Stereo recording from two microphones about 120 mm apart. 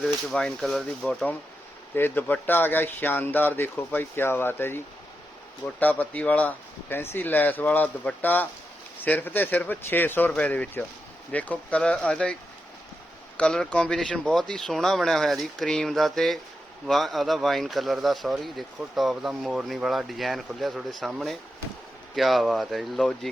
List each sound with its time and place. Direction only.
0.0 s speech: 5° left (ahead or behind)
5.8 s speech: 15° left (ahead or behind)